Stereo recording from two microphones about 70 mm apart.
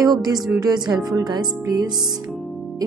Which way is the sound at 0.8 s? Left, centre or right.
Centre.